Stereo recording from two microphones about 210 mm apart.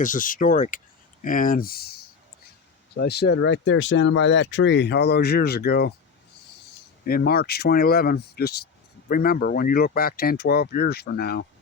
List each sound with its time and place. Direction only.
0.0 s speech: 40° left (ahead or behind)
7.0 s speech: 45° left (ahead or behind)